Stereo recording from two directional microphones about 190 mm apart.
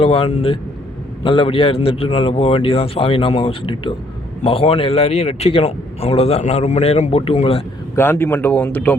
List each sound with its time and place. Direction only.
0.0 s a man's voice: 30° left (ahead or behind)
7.9 s speech: 10° left (ahead or behind)